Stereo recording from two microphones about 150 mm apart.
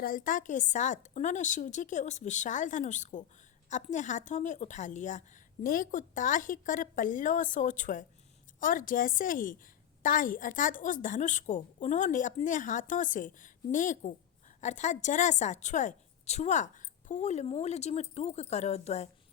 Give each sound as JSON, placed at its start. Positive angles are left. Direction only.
{"t": 0.0, "sound": "a woman's voice", "side_deg": 65}